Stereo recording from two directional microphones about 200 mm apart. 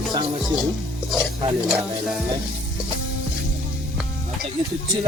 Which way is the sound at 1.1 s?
5° right (ahead or behind).